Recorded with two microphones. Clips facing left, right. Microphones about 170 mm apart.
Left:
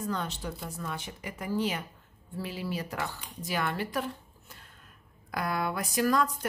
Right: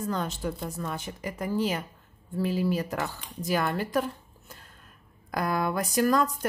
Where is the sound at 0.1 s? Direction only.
45° right (ahead or behind).